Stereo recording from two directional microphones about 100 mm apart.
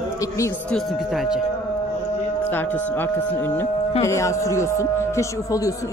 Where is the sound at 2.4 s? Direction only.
20° left (ahead or behind); by 5.7 s 35° left (ahead or behind).